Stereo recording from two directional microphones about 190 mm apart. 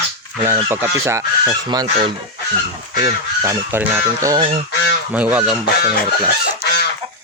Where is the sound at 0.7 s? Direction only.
15° right (ahead or behind).